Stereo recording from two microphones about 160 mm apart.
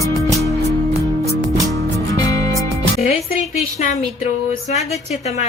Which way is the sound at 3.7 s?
50° left (ahead or behind).